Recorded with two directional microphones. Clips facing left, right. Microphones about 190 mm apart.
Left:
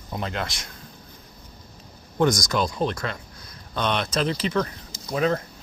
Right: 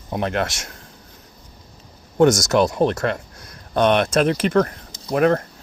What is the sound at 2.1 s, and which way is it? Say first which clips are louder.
Speech: right 7 dB; 70° right (ahead or behind).